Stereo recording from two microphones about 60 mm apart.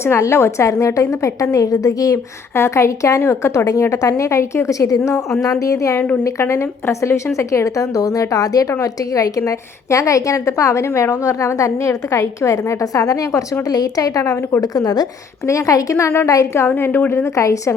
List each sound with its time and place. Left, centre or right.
0.0 s a woman's voice: left
2.6 s a woman's voice: left
6.4 s a woman's voice: left
8.8 s a woman's voice: left
14.6 s speech: left
15.4 s a woman's voice: left
16.6 s a woman's voice: left